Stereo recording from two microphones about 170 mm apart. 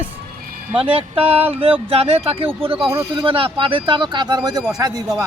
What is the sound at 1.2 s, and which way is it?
Speech, 10° right (ahead or behind).